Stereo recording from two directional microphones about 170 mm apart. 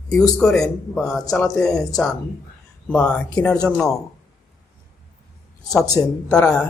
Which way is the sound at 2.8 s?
10° left (ahead or behind).